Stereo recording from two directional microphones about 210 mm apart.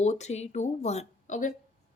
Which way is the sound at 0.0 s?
30° left (ahead or behind).